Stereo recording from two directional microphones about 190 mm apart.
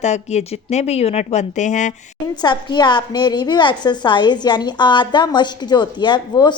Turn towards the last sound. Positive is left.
turn(degrees=20)  # may be behind; listen again after turning